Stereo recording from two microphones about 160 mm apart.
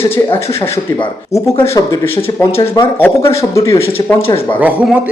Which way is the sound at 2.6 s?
30° left (ahead or behind).